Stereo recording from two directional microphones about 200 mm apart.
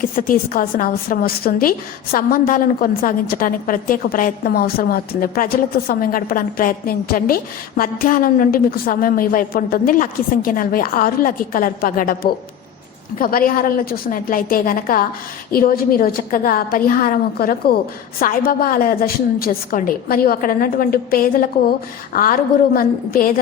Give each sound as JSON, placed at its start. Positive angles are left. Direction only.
{"t": 0.0, "sound": "a woman's voice", "side_deg": 45}